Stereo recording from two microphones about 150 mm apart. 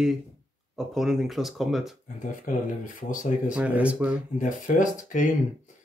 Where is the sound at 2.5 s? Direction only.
60° left (ahead or behind).